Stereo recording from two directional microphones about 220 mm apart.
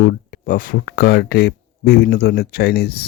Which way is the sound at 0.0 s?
40° left (ahead or behind).